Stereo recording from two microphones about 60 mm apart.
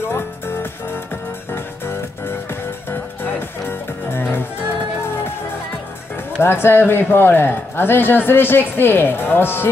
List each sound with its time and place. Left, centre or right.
0.1 s music: left
3.6 s music: left
6.4 s a man's voice: left